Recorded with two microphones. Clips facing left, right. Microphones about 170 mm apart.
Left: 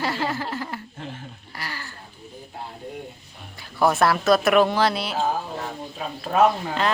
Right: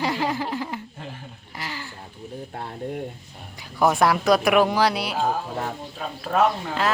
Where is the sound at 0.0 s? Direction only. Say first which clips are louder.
Right 1 dB; 15° right (ahead or behind).